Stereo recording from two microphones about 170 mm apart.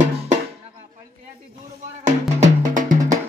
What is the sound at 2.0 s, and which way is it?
Music, 45° right (ahead or behind).